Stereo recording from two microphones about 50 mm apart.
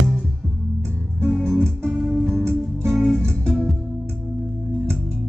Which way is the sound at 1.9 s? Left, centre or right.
Centre.